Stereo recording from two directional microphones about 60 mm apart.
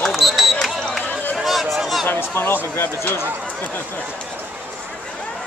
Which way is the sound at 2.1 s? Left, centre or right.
Left.